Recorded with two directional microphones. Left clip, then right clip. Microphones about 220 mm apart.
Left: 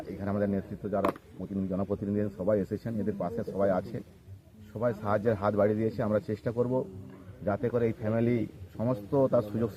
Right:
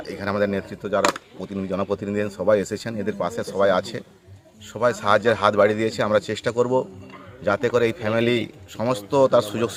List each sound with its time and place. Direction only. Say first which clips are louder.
0.2 s speech: right 9 dB; 25° right (ahead or behind)